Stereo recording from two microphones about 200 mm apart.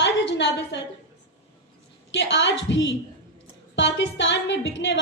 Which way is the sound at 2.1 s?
65° left (ahead or behind).